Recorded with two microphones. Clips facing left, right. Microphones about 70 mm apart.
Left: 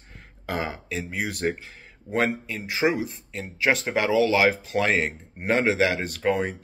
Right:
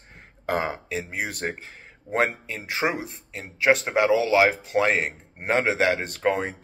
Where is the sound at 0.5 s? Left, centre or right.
Right.